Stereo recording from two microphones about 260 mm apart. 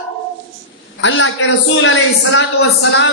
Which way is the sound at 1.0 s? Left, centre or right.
Left.